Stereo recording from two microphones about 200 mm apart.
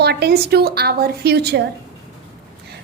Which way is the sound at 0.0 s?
55° right (ahead or behind).